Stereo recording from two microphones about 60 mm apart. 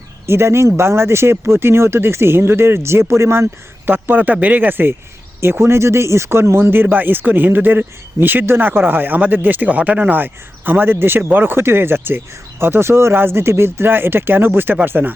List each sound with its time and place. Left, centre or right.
0.3 s speech: right